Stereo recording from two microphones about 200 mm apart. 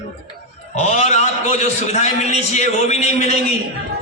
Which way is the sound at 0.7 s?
35° left (ahead or behind).